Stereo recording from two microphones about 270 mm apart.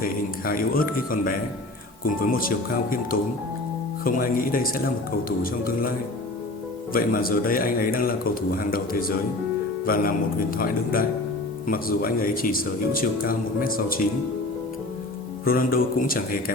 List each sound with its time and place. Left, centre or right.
0.0 s speech: left
4.0 s speech: left
6.9 s speech: left
11.7 s speech: left
15.4 s speech: left